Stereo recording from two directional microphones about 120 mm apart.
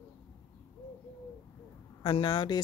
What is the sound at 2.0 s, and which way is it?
Speech, 40° left (ahead or behind).